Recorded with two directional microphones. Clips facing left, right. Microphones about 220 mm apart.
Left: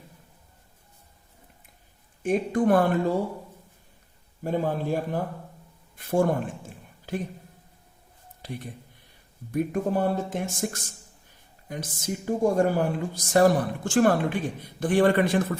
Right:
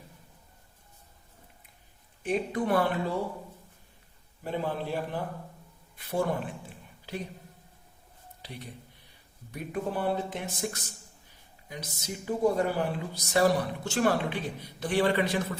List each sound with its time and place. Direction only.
2.2 s a woman's voice: 45° left (ahead or behind)
4.4 s a woman's voice: 45° left (ahead or behind)
6.0 s a sound: 50° left (ahead or behind)
8.4 s a woman's voice: 50° left (ahead or behind)